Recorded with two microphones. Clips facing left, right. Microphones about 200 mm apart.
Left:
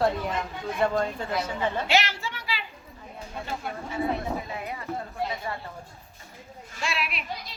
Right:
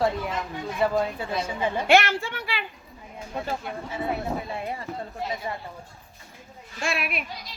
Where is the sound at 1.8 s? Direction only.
55° right (ahead or behind).